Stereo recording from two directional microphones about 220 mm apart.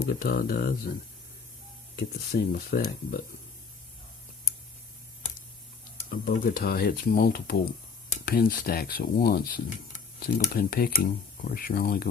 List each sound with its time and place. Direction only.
0.0 s speech: 40° left (ahead or behind)
2.0 s speech: 45° left (ahead or behind)
6.1 s speech: 40° left (ahead or behind)